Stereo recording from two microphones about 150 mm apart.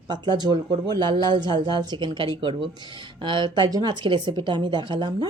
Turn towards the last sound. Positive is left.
turn(degrees=-30)  # may be behind; listen again after turning